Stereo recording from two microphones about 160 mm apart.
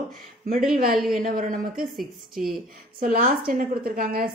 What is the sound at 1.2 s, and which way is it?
Speech, 60° right (ahead or behind).